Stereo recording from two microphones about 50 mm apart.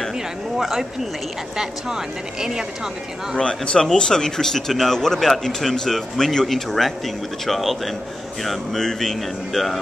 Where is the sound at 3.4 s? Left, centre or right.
Centre.